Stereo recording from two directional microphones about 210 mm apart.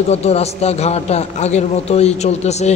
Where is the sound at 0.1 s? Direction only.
30° left (ahead or behind).